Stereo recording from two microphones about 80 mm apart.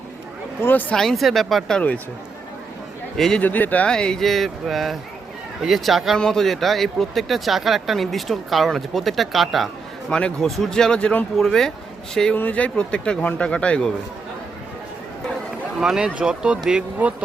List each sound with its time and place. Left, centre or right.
0.6 s speech: left
0.9 s a man's voice: centre
3.2 s a man's voice: centre
3.4 s a man's voice: centre
10.1 s a man's voice: centre
12.3 s speech: centre
15.8 s speech: centre